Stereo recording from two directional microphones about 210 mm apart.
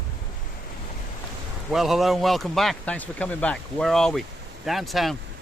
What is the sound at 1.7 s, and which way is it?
Speech, centre (ahead or behind).